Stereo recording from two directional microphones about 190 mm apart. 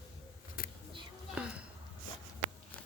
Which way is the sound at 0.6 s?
50° left (ahead or behind).